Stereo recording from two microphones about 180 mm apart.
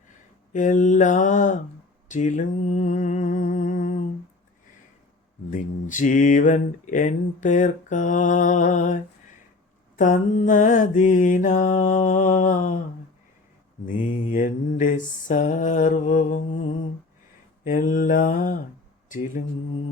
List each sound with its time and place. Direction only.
0.5 s mantra: 45° left (ahead or behind)
2.0 s humming: 45° left (ahead or behind)
5.5 s mantra: 45° left (ahead or behind)
10.0 s mantra: 45° left (ahead or behind)
13.8 s mantra: 45° left (ahead or behind)
19.0 s speech: 45° left (ahead or behind)